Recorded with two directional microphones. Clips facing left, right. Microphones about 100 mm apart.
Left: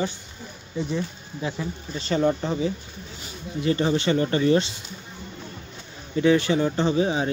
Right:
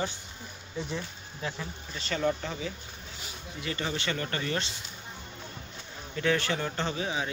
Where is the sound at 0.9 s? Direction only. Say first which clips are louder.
Left 8 dB; 5° left (ahead or behind).